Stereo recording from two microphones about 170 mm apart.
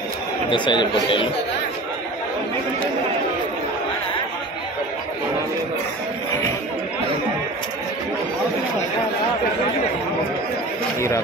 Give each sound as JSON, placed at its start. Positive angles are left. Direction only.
{"t": 0.5, "sound": "speech", "side_deg": 30}